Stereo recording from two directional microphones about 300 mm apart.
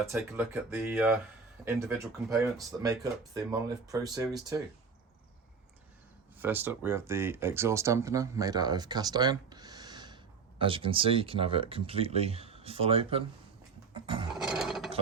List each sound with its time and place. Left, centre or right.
0.1 s speech: centre
6.4 s speech: centre
13.9 s roaring cats: centre
14.3 s ratchet: centre